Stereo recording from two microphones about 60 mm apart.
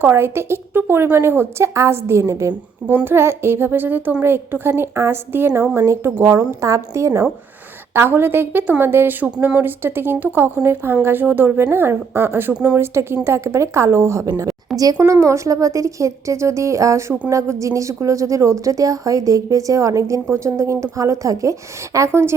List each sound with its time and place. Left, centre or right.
0.0 s a woman's voice: right
2.8 s speech: right
5.7 s a woman's voice: right
6.0 s a woman's voice: right
7.9 s speech: right
9.2 s a woman's voice: right
14.9 s a woman's voice: right
21.9 s a woman's voice: right